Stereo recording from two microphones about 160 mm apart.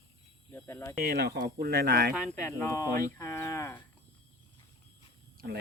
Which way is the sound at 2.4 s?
20° left (ahead or behind).